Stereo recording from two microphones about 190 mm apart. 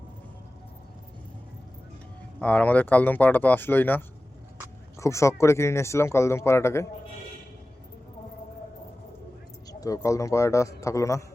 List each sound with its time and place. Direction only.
2.4 s speech: 5° left (ahead or behind)
9.6 s speech: 20° left (ahead or behind)